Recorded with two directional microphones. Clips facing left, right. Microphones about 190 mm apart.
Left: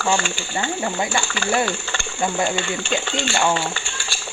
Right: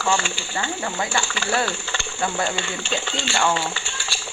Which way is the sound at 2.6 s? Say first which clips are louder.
Left 3 dB; 50° left (ahead or behind).